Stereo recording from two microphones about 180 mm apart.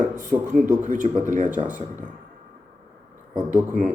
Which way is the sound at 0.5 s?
10° right (ahead or behind).